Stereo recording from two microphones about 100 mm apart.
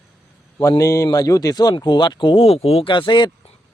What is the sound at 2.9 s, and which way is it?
Speech, 50° left (ahead or behind).